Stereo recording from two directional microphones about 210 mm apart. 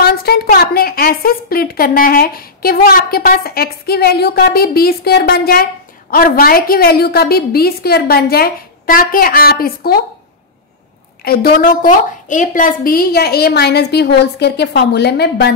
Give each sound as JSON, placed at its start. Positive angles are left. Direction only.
{"t": 0.0, "sound": "a woman's voice", "side_deg": 45}
{"t": 11.2, "sound": "a woman's voice", "side_deg": 45}